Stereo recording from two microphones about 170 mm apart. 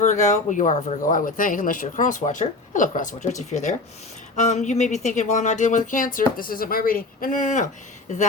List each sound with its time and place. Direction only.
0.0 s speech: 45° left (ahead or behind)